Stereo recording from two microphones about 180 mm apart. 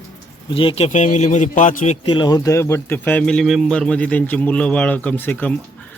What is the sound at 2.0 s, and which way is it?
Speech, 25° left (ahead or behind).